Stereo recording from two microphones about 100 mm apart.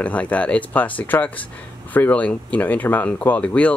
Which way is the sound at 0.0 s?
15° left (ahead or behind).